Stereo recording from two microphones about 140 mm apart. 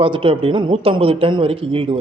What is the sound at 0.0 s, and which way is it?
A man's voice, 40° right (ahead or behind).